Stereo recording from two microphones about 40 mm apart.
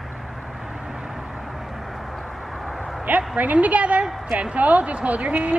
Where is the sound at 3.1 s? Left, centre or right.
Right.